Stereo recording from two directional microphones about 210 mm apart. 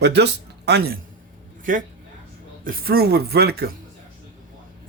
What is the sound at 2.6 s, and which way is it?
Speech, 45° right (ahead or behind).